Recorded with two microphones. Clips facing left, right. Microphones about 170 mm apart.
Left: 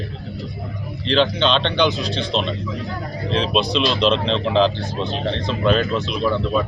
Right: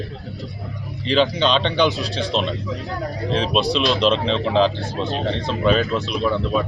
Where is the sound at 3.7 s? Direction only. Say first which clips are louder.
Left 1 dB; 5° right (ahead or behind).